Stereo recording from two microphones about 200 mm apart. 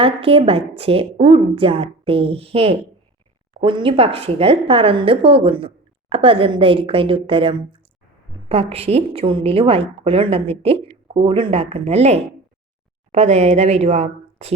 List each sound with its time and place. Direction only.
0.0 s speech: 30° right (ahead or behind)